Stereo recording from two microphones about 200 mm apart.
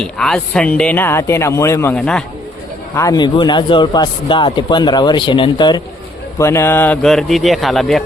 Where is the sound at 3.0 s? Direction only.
20° left (ahead or behind).